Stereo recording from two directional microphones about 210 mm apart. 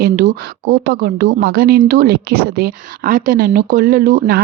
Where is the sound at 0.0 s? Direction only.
40° right (ahead or behind).